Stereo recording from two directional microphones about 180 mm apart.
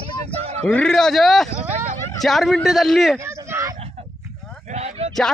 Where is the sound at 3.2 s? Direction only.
15° right (ahead or behind).